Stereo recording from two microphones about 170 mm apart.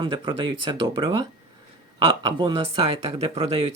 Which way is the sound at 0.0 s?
30° right (ahead or behind).